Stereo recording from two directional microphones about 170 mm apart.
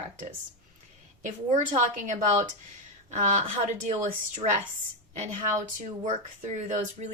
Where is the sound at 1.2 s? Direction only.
45° right (ahead or behind).